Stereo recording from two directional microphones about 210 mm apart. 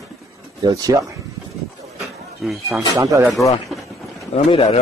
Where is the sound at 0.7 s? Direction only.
15° right (ahead or behind).